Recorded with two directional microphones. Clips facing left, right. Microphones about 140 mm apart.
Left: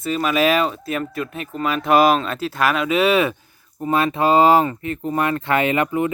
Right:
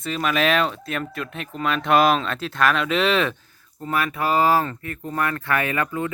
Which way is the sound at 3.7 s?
20° left (ahead or behind).